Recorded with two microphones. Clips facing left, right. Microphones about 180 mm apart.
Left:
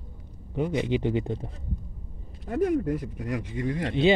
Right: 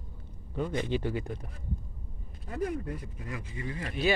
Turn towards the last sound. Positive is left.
turn(degrees=75)  # may be behind; listen again after turning